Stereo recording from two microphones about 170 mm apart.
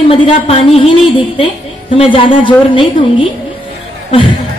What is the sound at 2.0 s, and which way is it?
Speech, 30° left (ahead or behind).